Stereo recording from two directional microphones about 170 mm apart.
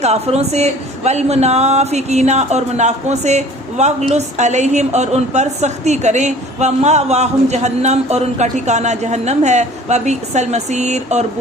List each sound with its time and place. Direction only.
0.0 s a woman's voice: 40° right (ahead or behind)